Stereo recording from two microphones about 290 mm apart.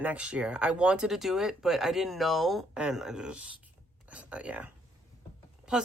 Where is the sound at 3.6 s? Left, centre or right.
Centre.